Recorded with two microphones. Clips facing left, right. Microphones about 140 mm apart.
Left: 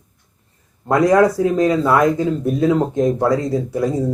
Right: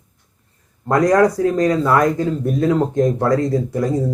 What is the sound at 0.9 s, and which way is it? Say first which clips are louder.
A man's voice: left 1 dB; 5° left (ahead or behind).